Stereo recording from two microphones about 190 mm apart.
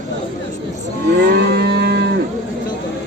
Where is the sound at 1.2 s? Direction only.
60° right (ahead or behind).